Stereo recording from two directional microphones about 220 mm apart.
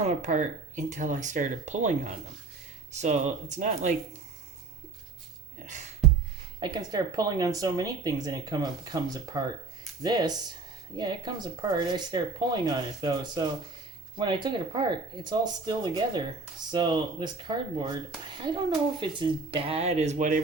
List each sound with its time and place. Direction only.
0.0 s speech: 35° right (ahead or behind)
6.6 s speech: 20° right (ahead or behind)